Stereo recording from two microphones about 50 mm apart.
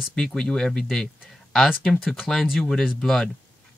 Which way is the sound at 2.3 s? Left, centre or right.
Left.